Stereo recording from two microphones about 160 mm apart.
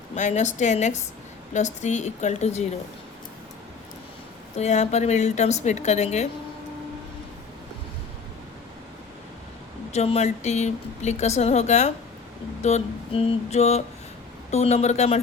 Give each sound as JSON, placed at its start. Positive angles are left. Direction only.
{"t": 0.2, "sound": "speech", "side_deg": 45}
{"t": 4.5, "sound": "speech", "side_deg": 45}
{"t": 9.9, "sound": "speech", "side_deg": 45}